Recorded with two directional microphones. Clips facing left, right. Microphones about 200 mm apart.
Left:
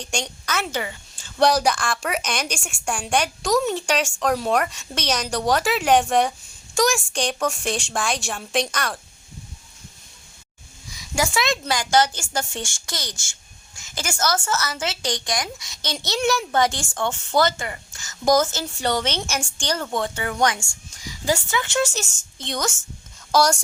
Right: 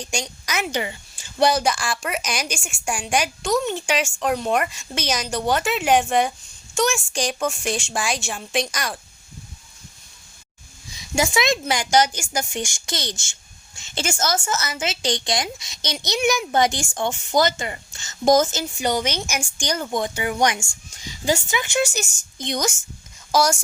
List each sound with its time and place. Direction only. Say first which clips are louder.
0.1 s speech: left 2 dB; 10° right (ahead or behind)
1.2 s a woman's voice: left 1 dB; 5° right (ahead or behind)
10.9 s a woman's voice: right 2 dB; 20° right (ahead or behind)